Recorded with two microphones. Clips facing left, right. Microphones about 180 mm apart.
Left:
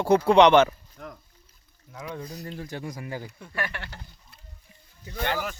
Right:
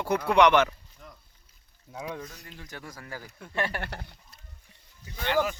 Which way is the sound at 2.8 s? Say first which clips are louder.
Left 7 dB; 15° left (ahead or behind).